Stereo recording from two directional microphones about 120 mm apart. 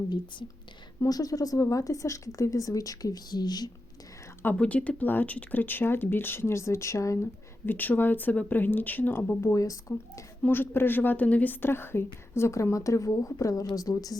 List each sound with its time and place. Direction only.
1.0 s a woman's voice: 30° left (ahead or behind)
4.4 s a woman's voice: 10° left (ahead or behind); by 14.2 s 30° left (ahead or behind)